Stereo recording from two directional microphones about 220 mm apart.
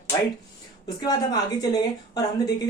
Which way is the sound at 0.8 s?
15° left (ahead or behind).